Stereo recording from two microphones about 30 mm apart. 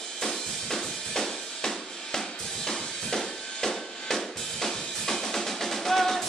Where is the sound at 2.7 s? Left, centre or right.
Centre.